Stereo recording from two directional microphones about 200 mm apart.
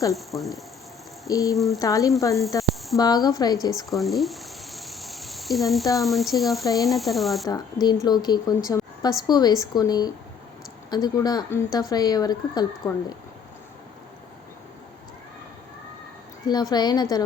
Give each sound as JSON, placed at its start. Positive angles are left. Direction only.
{"t": 0.1, "sound": "speech", "side_deg": 0}
{"t": 1.3, "sound": "speech", "side_deg": 15}
{"t": 1.5, "sound": "speech", "side_deg": 0}
{"t": 1.8, "sound": "speech", "side_deg": 15}
{"t": 3.8, "sound": "a sound", "side_deg": 0}
{"t": 6.0, "sound": "speech", "side_deg": 0}
{"t": 7.4, "sound": "speech", "side_deg": 20}
{"t": 16.5, "sound": "speech", "side_deg": 20}